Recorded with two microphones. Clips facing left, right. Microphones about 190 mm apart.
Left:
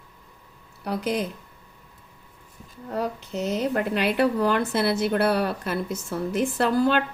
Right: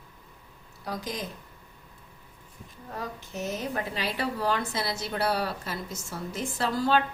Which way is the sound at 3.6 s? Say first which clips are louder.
Left 8 dB; 65° left (ahead or behind).